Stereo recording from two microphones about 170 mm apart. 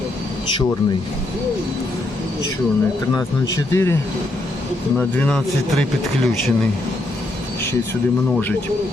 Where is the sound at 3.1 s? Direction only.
20° left (ahead or behind).